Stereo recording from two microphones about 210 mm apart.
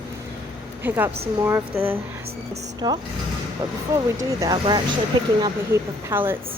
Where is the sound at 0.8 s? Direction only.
10° right (ahead or behind).